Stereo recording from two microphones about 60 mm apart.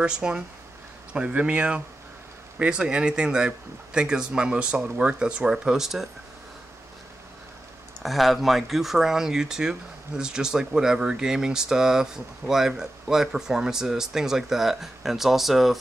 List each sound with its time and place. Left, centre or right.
0.0 s speech: centre
8.0 s speech: centre